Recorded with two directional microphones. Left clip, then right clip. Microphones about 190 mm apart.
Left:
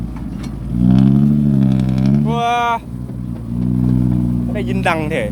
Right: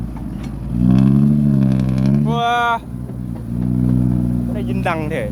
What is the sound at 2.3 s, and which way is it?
Vehicle, 5° left (ahead or behind).